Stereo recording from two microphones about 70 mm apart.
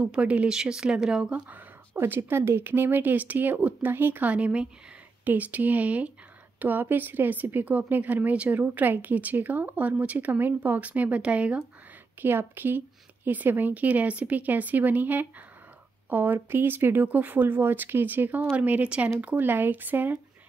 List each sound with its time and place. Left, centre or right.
0.0 s speech: centre
1.5 s speech: right
12.2 s speech: right